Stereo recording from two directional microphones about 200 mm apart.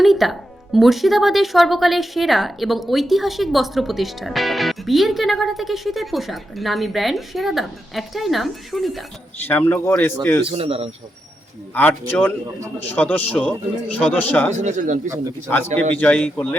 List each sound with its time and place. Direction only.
0.0 s a man's voice: centre (ahead or behind)
10.4 s speech: 25° right (ahead or behind)
11.7 s a man's voice: 10° left (ahead or behind)
14.5 s speech: 35° right (ahead or behind)
15.4 s a man's voice: 10° left (ahead or behind)